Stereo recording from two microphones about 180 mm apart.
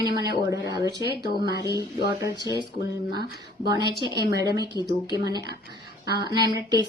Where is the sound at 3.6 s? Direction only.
25° right (ahead or behind).